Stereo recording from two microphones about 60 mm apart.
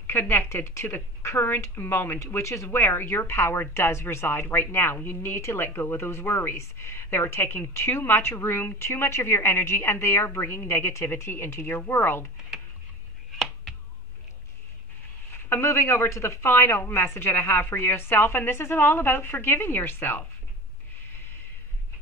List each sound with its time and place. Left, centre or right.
0.0 s a woman's voice: left
2.2 s speech: left
2.8 s a woman's voice: left
15.5 s speech: left